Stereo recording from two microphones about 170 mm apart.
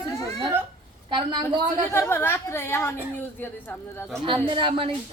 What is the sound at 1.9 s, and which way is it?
A woman's voice, 15° left (ahead or behind).